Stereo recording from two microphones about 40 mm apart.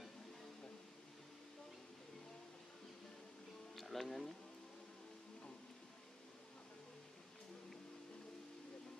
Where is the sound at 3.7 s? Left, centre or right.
Centre.